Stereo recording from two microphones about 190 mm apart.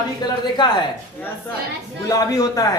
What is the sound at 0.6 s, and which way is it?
Speech, 25° left (ahead or behind).